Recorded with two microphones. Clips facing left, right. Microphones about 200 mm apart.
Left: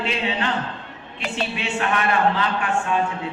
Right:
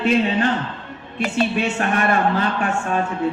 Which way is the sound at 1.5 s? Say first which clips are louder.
Right 3 dB; 45° right (ahead or behind).